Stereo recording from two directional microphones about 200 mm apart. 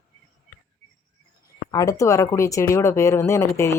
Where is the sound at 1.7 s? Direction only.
15° left (ahead or behind).